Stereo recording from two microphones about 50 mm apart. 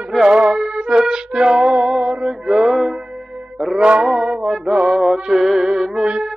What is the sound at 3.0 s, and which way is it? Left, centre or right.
Music, centre.